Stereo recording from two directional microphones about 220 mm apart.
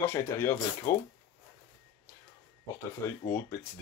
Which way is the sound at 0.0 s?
10° left (ahead or behind).